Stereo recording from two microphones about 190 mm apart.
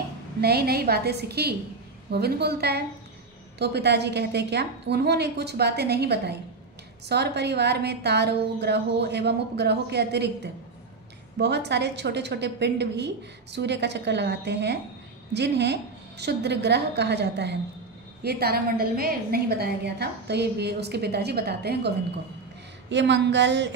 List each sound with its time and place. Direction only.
0.4 s a woman's voice: 55° right (ahead or behind)